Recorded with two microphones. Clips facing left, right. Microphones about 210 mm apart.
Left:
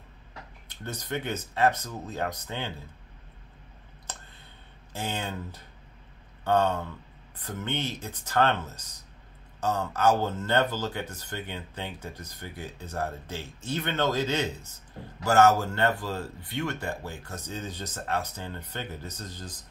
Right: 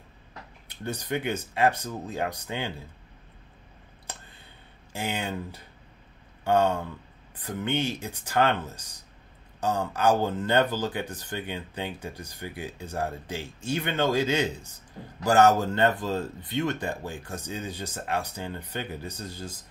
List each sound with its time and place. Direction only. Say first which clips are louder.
0.8 s speech: right 3 dB; 10° right (ahead or behind)
4.1 s a sound: right 1 dB; 10° right (ahead or behind)
4.9 s speech: right 2 dB; 10° right (ahead or behind)